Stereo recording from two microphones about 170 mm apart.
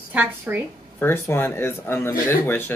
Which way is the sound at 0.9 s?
10° left (ahead or behind).